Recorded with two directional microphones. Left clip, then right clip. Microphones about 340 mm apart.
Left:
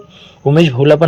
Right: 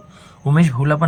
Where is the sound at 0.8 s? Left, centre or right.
Centre.